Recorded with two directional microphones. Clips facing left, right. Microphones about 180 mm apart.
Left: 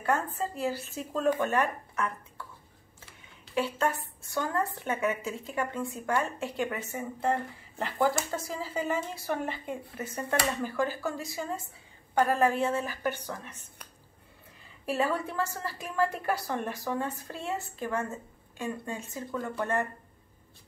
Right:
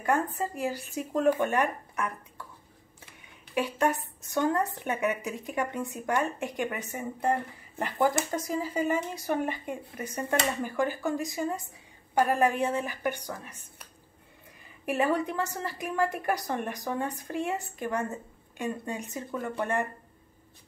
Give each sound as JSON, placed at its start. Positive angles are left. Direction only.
{"t": 0.0, "sound": "a woman's voice", "side_deg": -15}
{"t": 3.5, "sound": "a woman's voice", "side_deg": -15}
{"t": 14.9, "sound": "a woman's voice", "side_deg": -20}